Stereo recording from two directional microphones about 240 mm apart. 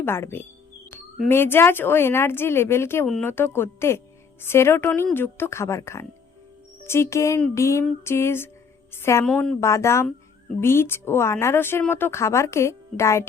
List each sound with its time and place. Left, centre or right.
0.0 s speech: centre